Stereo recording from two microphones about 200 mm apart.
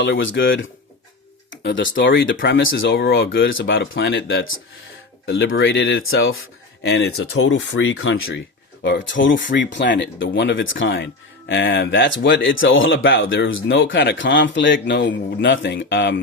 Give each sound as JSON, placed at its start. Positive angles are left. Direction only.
{"t": 0.0, "sound": "speech", "side_deg": 65}
{"t": 2.9, "sound": "speech", "side_deg": 65}
{"t": 6.9, "sound": "speech", "side_deg": 75}
{"t": 9.1, "sound": "speech", "side_deg": 70}